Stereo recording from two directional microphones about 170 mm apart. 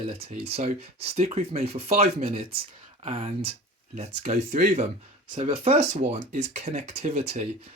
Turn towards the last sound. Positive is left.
turn(degrees=-40)  # may be behind; listen again after turning